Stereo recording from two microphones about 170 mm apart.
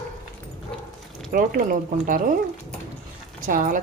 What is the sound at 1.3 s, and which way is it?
Speech, 55° right (ahead or behind).